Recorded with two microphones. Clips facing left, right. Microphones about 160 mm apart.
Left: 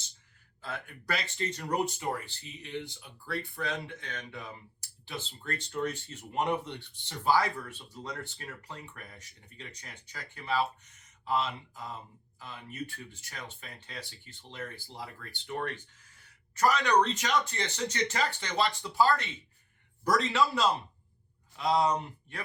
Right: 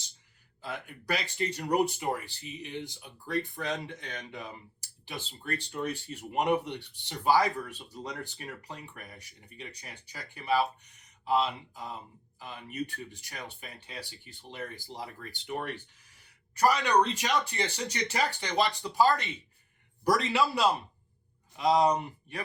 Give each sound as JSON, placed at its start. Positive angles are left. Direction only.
{"t": 0.6, "sound": "speech", "side_deg": -15}